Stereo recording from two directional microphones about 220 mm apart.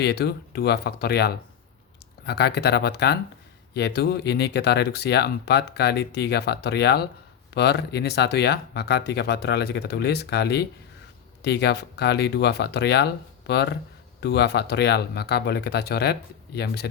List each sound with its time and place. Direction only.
0.0 s speech: 45° left (ahead or behind)